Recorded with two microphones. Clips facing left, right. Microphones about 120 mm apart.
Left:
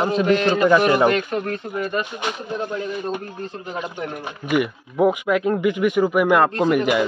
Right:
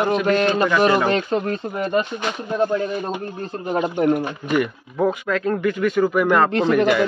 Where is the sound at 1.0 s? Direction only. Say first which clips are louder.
Even; 30° right (ahead or behind).